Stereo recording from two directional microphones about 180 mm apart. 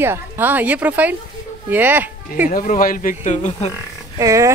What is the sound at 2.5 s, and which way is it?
Speech, 50° left (ahead or behind).